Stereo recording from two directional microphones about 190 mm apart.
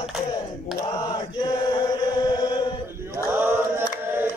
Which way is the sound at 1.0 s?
25° left (ahead or behind).